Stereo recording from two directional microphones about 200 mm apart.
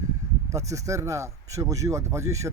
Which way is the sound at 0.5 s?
15° right (ahead or behind).